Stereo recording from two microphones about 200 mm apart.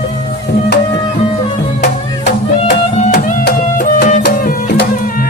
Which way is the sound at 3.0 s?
40° left (ahead or behind).